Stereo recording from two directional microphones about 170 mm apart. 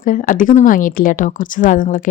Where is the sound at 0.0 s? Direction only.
50° left (ahead or behind).